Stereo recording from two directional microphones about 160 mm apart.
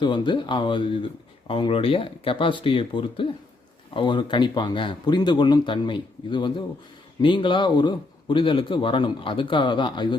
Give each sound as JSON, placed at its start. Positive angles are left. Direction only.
{"t": 0.0, "sound": "a man's voice", "side_deg": 30}